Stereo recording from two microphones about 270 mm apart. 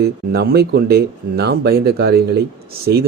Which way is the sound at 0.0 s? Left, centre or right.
Right.